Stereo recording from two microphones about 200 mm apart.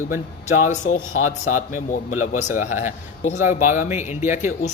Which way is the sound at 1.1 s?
90° left.